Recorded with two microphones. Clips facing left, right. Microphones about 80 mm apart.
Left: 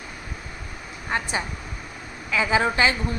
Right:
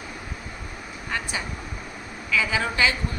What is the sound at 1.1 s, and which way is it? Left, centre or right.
Speech, left.